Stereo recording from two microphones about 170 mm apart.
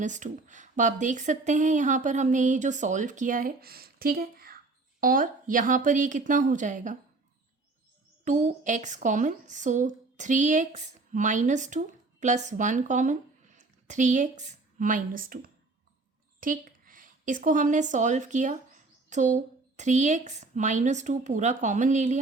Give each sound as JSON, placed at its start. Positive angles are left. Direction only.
{"t": 0.0, "sound": "speech", "side_deg": -45}
{"t": 8.2, "sound": "a woman's voice", "side_deg": -45}